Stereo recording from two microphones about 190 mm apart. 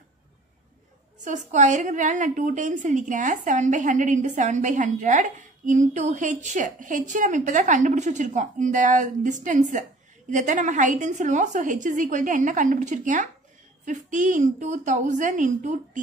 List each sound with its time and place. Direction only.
1.2 s a woman's voice: 40° right (ahead or behind)